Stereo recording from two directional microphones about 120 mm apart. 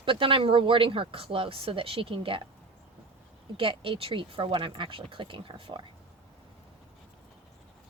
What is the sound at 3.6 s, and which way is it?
Speech, 50° right (ahead or behind).